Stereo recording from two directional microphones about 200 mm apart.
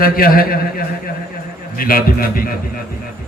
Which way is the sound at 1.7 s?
45° left (ahead or behind).